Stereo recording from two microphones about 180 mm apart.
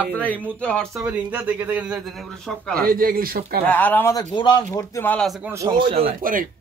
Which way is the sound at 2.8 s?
50° right (ahead or behind).